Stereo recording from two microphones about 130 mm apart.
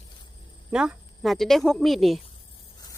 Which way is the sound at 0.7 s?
5° right (ahead or behind).